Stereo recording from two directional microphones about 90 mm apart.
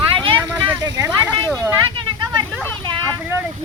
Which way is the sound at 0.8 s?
40° right (ahead or behind).